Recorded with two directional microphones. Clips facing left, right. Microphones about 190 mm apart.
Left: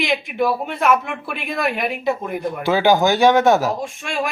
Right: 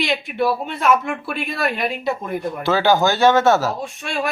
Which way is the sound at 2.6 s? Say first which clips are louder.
Left 1 dB; 15° left (ahead or behind).